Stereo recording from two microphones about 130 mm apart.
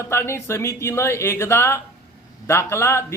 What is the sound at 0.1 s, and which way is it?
A man's voice, 20° left (ahead or behind).